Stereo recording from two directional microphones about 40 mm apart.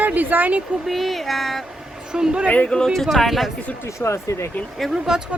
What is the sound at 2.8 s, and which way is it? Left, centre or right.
Speech, centre.